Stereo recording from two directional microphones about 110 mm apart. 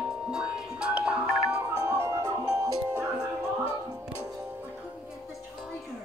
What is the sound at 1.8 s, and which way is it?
Music, 25° right (ahead or behind).